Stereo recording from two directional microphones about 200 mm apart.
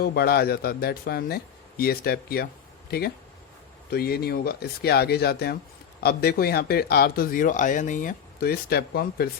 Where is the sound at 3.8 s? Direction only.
50° left (ahead or behind).